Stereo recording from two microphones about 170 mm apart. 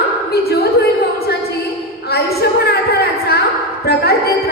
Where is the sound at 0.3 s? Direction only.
70° left (ahead or behind).